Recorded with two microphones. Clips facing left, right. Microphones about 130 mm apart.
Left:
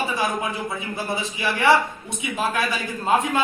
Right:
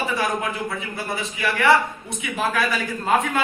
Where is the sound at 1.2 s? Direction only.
20° left (ahead or behind).